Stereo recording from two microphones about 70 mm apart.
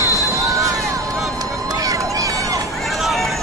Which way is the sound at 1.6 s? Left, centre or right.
Right.